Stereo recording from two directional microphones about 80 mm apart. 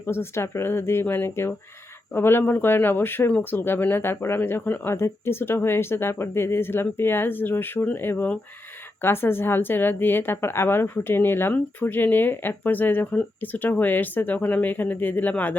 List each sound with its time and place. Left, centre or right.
0.0 s a woman's voice: left